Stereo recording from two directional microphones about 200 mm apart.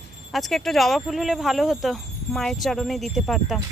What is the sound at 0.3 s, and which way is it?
Speech, centre (ahead or behind).